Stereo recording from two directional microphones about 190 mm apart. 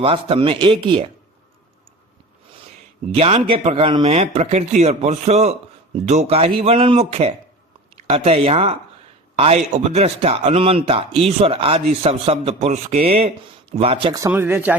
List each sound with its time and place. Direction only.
0.0 s speech: 30° right (ahead or behind)
3.2 s a man's voice: 30° right (ahead or behind)
14.2 s speech: 10° right (ahead or behind)